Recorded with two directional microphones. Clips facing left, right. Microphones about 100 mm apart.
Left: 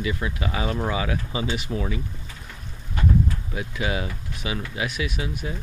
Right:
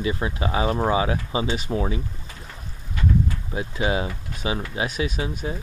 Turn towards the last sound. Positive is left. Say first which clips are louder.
# right 2 dB
turn(degrees=-30)  # may be behind; listen again after turning